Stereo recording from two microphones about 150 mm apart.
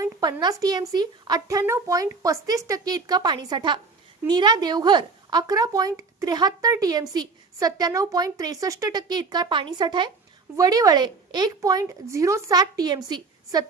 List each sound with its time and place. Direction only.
0.0 s speech: 25° right (ahead or behind)